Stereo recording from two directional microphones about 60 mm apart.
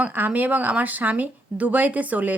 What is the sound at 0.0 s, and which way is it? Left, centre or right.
Speech, right.